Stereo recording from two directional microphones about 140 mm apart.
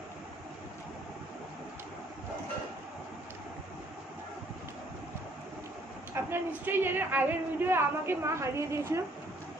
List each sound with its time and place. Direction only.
6.1 s speech: 15° right (ahead or behind)